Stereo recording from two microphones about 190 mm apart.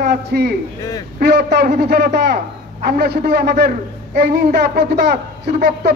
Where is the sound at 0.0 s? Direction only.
60° right (ahead or behind).